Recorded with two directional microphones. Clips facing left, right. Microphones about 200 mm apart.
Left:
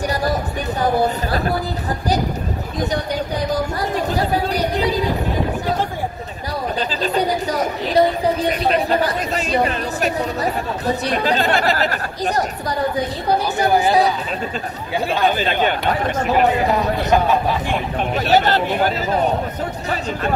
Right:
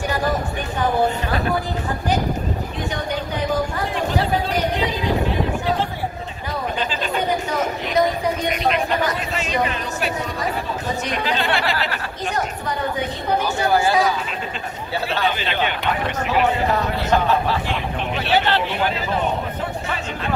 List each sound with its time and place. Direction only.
0.1 s a sound: 40° left (ahead or behind)
3.9 s chatter: 40° left (ahead or behind)
6.8 s a woman's voice: 35° left (ahead or behind)
13.7 s speech: 20° left (ahead or behind)
15.2 s speech: 45° left (ahead or behind)
16.7 s speech: 15° left (ahead or behind)
17.6 s a woman's voice: 45° left (ahead or behind)